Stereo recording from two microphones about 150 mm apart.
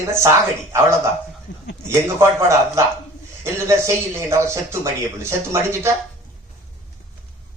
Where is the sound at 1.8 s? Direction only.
15° right (ahead or behind).